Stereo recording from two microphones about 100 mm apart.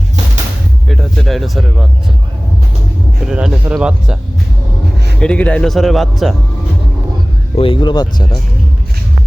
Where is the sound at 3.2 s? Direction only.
10° right (ahead or behind).